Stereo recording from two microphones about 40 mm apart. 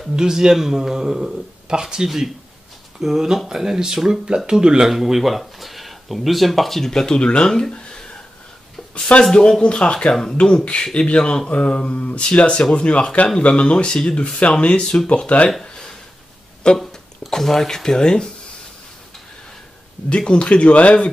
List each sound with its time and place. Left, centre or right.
0.1 s speech: centre
6.9 s speech: centre
9.1 s speech: left
15.1 s speech: left
16.7 s a sound: centre
17.3 s speech: centre
20.2 s speech: left